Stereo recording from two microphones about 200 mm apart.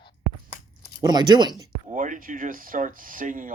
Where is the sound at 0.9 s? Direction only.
20° right (ahead or behind).